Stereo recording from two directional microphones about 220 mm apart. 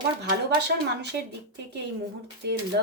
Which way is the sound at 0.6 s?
50° right (ahead or behind).